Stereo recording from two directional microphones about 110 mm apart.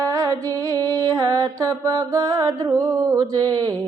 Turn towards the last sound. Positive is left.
turn(degrees=-35)  # may be behind; listen again after turning